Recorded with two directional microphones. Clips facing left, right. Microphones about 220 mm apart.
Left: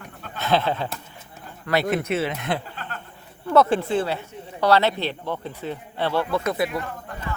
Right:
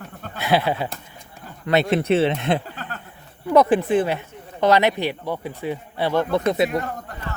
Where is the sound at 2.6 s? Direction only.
45° right (ahead or behind).